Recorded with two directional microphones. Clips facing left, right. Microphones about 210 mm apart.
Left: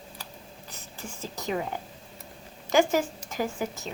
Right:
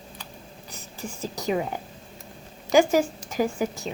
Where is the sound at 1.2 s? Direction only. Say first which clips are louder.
Right 4 dB; 15° right (ahead or behind).